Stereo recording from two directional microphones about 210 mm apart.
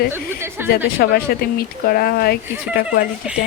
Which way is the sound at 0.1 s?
10° right (ahead or behind).